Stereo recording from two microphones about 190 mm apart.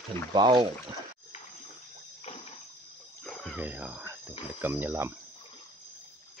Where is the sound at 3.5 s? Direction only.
10° right (ahead or behind).